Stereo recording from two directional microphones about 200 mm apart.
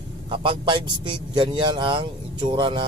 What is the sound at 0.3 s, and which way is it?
Speech, 25° right (ahead or behind).